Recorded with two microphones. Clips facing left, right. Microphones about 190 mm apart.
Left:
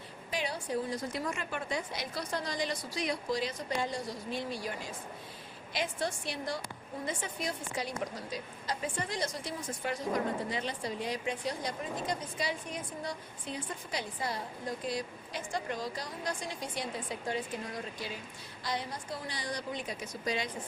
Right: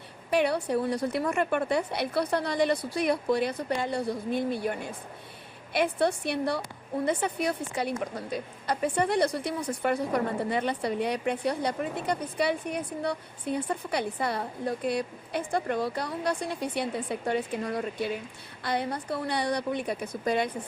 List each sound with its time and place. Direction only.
0.3 s a woman's voice: 65° right (ahead or behind)